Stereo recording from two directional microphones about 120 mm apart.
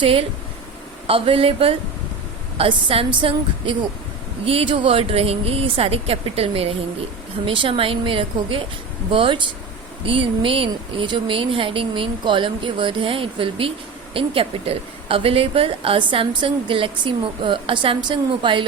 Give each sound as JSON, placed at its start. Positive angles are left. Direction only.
{"t": 0.0, "sound": "speech", "side_deg": -50}